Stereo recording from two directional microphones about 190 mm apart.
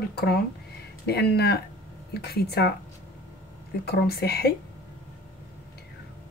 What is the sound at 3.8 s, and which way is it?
Speech, 55° left (ahead or behind).